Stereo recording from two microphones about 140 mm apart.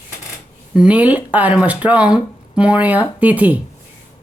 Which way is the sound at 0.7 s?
10° right (ahead or behind).